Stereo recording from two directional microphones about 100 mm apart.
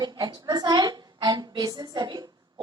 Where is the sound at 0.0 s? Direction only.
45° right (ahead or behind).